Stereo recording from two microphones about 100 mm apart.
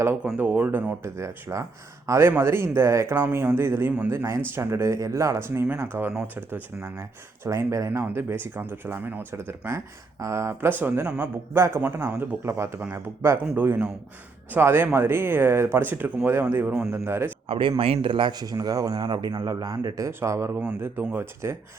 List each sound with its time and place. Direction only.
0.3 s speech: 15° right (ahead or behind)
1.1 s speech: 30° right (ahead or behind)
11.5 s speech: 25° right (ahead or behind)
17.5 s a man's voice: 60° right (ahead or behind); by 20.1 s 40° right (ahead or behind)
20.1 s speech: 25° right (ahead or behind)